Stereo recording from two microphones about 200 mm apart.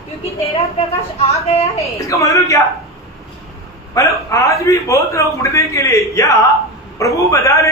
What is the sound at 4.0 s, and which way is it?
A man's voice, 15° left (ahead or behind).